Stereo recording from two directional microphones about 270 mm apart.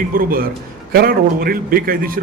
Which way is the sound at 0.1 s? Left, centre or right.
Right.